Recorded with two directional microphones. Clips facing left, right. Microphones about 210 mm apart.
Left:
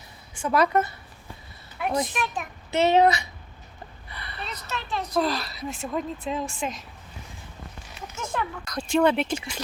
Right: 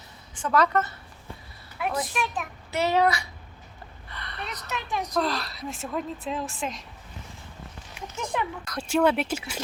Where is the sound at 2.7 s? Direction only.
20° left (ahead or behind).